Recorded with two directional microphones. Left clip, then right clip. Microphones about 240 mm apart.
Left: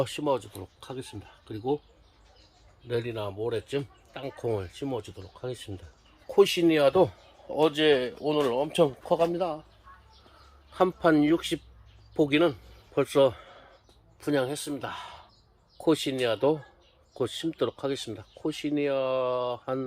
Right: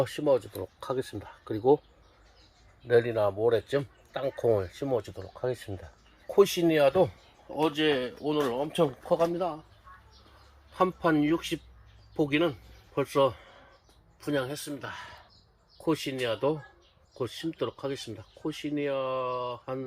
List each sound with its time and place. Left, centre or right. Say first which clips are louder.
0.0 s speech: right 2 dB; centre
2.8 s speech: right 8 dB; centre
6.2 s speech: left 1 dB; centre
10.8 s speech: left 3 dB; centre